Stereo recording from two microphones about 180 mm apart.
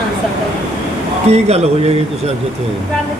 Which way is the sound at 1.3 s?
35° right (ahead or behind).